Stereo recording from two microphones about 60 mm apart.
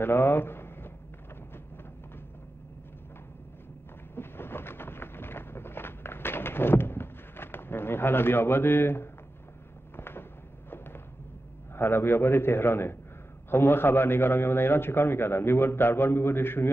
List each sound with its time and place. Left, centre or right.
0.0 s speech: left
4.1 s a sound: left
9.9 s fireworks: left
11.7 s a man's voice: left